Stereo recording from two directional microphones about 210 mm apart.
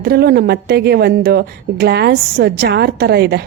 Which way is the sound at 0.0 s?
45° right (ahead or behind).